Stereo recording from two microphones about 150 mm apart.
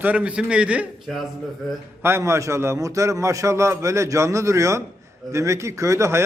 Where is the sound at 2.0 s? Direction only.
15° right (ahead or behind).